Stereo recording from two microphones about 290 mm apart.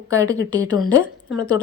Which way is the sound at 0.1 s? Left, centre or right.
Centre.